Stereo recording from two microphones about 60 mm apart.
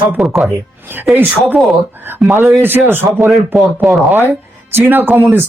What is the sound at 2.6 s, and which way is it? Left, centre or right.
Speech, right.